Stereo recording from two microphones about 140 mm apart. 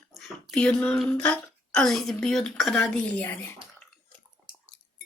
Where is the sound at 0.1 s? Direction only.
Centre (ahead or behind).